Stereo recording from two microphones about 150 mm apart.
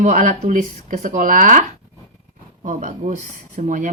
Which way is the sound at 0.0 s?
55° right (ahead or behind).